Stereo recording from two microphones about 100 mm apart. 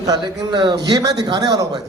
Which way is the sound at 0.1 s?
50° right (ahead or behind).